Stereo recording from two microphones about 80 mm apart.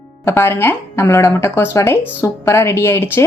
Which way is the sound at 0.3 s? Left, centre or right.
Left.